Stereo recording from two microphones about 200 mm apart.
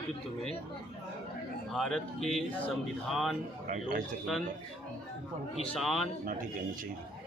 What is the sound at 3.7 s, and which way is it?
Speech, 40° right (ahead or behind).